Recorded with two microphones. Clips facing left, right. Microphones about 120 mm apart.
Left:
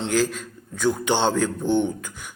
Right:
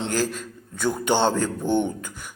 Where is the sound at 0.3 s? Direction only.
5° right (ahead or behind).